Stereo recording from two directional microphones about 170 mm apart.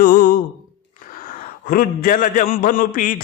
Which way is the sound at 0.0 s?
55° left (ahead or behind).